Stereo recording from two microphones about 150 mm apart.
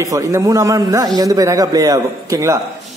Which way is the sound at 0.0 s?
20° right (ahead or behind).